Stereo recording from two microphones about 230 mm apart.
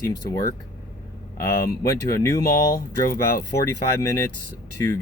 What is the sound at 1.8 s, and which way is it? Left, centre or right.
Speech, centre.